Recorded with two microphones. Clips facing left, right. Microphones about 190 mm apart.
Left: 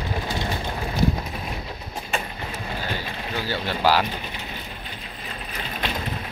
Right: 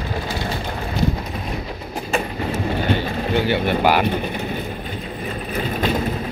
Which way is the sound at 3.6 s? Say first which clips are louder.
Right 7 dB; 55° right (ahead or behind).